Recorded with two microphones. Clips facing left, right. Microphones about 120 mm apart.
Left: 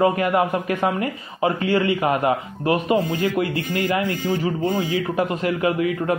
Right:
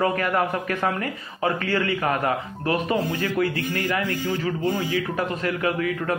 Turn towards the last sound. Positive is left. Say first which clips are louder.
# left 3 dB
turn(degrees=25)  # may be behind; listen again after turning